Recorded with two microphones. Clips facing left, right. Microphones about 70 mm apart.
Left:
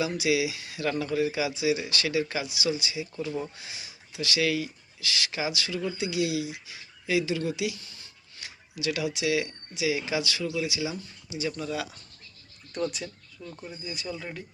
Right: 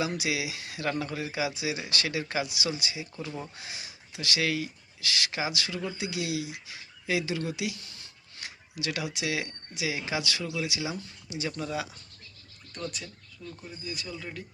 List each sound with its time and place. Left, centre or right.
0.1 s speech: right
0.9 s speech: right
6.0 s speech: right
7.8 s a sound: right
8.7 s speech: right
11.6 s speech: right
12.7 s a man's voice: centre
13.4 s speech: left
13.8 s a man's voice: centre